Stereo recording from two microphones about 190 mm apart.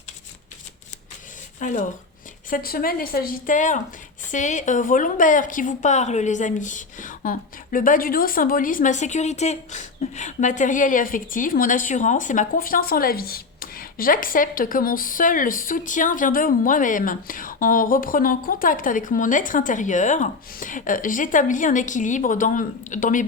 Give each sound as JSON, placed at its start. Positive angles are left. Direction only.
{"t": 1.5, "sound": "a woman's voice", "side_deg": 40}